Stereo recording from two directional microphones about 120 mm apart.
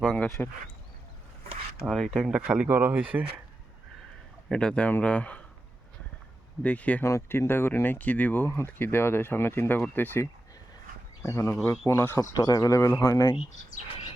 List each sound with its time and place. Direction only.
0.4 s speech: 15° left (ahead or behind)
1.8 s speech: centre (ahead or behind)
4.4 s speech: 5° left (ahead or behind)
6.6 s speech: 10° left (ahead or behind)
12.3 s speech: 30° left (ahead or behind)